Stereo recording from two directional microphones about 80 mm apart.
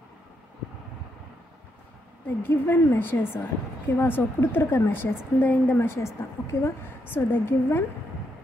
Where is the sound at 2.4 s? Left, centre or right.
Left.